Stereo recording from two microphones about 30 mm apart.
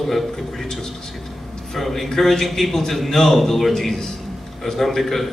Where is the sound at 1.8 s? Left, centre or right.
Centre.